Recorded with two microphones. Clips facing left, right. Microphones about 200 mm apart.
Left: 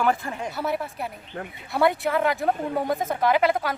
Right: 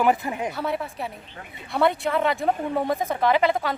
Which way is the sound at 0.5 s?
5° left (ahead or behind).